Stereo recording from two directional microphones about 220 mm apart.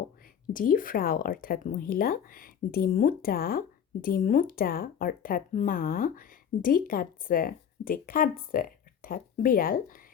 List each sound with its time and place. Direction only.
0.5 s speech: 40° left (ahead or behind)